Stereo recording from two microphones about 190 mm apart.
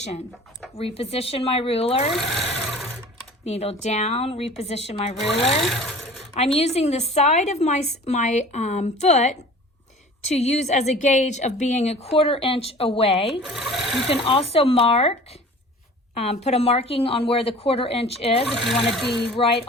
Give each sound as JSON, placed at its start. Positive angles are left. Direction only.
{"t": 0.8, "sound": "a woman's voice", "side_deg": 30}
{"t": 2.1, "sound": "speech", "side_deg": 0}
{"t": 3.4, "sound": "a woman's voice", "side_deg": 35}
{"t": 6.6, "sound": "a woman's voice", "side_deg": 35}
{"t": 13.4, "sound": "speech", "side_deg": 0}
{"t": 14.1, "sound": "a woman's voice", "side_deg": 30}
{"t": 18.4, "sound": "speech", "side_deg": 0}
{"t": 19.4, "sound": "speech", "side_deg": 30}